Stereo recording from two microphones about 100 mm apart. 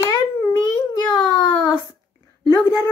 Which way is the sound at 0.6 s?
40° left (ahead or behind).